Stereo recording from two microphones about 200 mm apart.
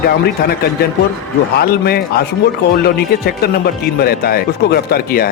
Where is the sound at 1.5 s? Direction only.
50° left (ahead or behind).